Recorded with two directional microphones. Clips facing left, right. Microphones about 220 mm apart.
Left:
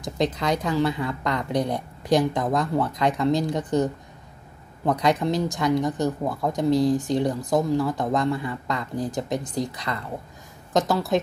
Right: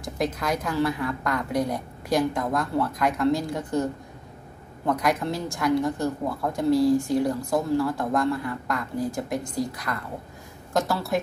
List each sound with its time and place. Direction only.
0.0 s a woman's voice: 20° left (ahead or behind)